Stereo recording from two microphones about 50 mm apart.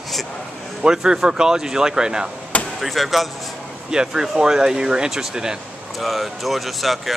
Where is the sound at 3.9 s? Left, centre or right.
Centre.